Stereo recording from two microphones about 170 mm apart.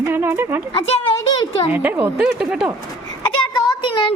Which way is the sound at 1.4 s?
30° left (ahead or behind).